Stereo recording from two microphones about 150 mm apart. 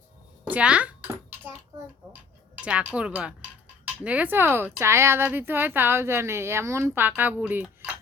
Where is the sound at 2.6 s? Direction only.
10° right (ahead or behind).